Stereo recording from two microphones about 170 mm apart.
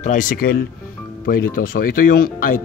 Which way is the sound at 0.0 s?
50° left (ahead or behind).